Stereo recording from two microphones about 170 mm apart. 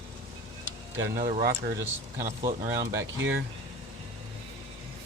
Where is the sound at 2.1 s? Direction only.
15° right (ahead or behind).